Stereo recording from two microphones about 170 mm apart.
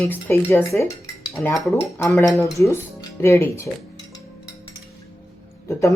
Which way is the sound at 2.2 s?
15° left (ahead or behind).